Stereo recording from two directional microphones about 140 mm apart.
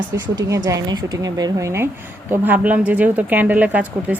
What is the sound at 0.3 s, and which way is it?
Speech, 25° right (ahead or behind).